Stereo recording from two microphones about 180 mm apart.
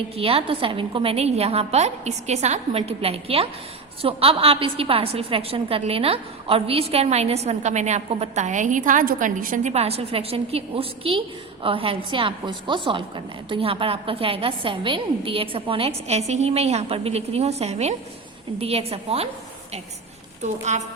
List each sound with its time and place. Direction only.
0.2 s a woman's voice: 30° right (ahead or behind)
20.4 s a woman's voice: 40° right (ahead or behind)